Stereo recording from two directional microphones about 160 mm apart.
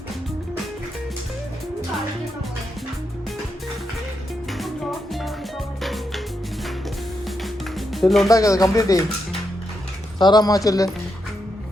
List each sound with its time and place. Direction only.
4.5 s music: centre (ahead or behind)
8.0 s speech: centre (ahead or behind)
8.3 s speech: 20° left (ahead or behind)
10.2 s speech: 25° left (ahead or behind)